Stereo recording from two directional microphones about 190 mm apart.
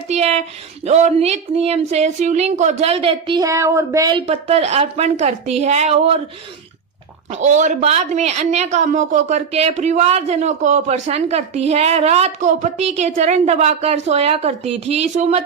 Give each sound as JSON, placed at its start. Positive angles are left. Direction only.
{"t": 0.1, "sound": "a woman's voice", "side_deg": -35}
{"t": 4.3, "sound": "a woman's voice", "side_deg": -35}
{"t": 7.3, "sound": "a woman's voice", "side_deg": -40}